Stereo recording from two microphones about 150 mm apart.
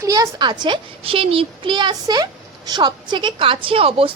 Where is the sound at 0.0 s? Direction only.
20° right (ahead or behind).